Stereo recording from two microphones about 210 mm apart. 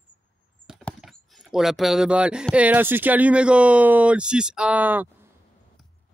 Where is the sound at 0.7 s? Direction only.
Centre (ahead or behind).